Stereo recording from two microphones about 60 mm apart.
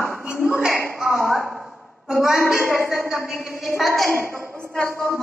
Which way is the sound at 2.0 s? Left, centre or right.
Centre.